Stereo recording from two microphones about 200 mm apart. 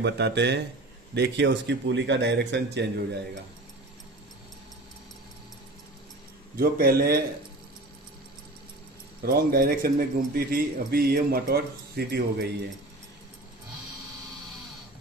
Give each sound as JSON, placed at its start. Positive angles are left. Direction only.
{"t": 0.0, "sound": "speech", "side_deg": -60}
{"t": 6.6, "sound": "a man's voice", "side_deg": -50}
{"t": 9.2, "sound": "a man's voice", "side_deg": -50}